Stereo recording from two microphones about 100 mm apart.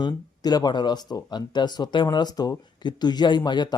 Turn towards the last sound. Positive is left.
turn(degrees=45)  # may be behind; listen again after turning